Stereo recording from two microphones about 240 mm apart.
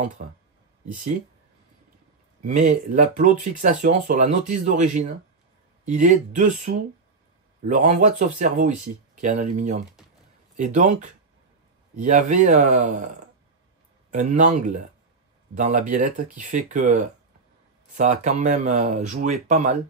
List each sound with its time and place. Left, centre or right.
0.2 s speech: right
2.4 s speech: right
8.2 s speech: right
14.1 s speech: right